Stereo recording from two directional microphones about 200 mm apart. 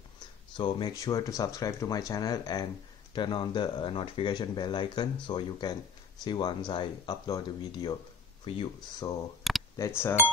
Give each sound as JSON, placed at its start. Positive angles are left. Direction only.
{"t": 0.6, "sound": "speech", "side_deg": 25}
{"t": 9.5, "sound": "a sound", "side_deg": 0}
{"t": 10.0, "sound": "speech", "side_deg": 10}